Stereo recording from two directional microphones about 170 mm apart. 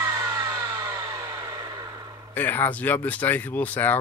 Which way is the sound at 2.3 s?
10° left (ahead or behind).